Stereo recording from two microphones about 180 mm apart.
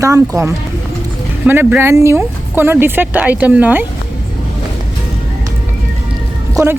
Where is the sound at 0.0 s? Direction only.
15° right (ahead or behind).